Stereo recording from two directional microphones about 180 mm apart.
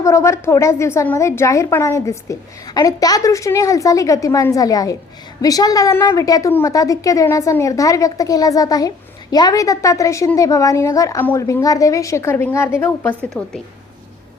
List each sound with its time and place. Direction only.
0.0 s a woman's voice: 15° left (ahead or behind)
13.4 s a woman's voice: 5° left (ahead or behind)